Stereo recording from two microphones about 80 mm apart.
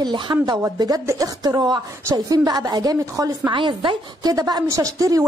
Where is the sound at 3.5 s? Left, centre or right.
Right.